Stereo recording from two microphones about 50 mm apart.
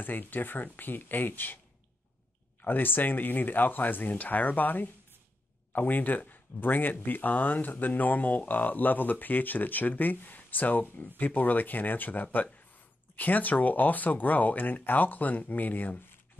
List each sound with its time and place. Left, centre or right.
0.0 s speech: left
2.6 s speech: left